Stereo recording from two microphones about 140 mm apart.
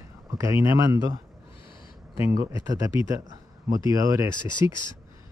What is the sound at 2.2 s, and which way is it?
Speech, 20° right (ahead or behind).